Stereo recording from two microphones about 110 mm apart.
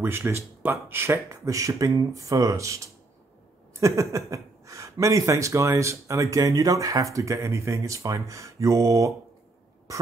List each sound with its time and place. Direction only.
0.0 s speech: 20° right (ahead or behind)